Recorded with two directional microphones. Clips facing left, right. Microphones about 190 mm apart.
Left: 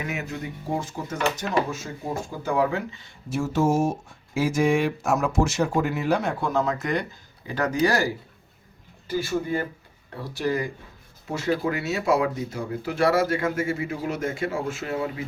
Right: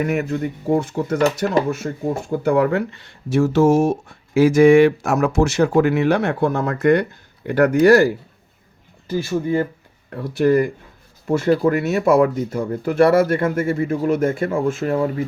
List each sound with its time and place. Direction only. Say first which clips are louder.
0.0 s speech: right 10 dB; 55° right (ahead or behind)
10.1 s speech: right 10 dB; 60° right (ahead or behind)